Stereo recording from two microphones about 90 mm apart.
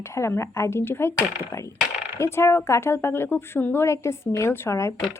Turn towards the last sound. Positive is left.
turn(degrees=30)  # may be behind; listen again after turning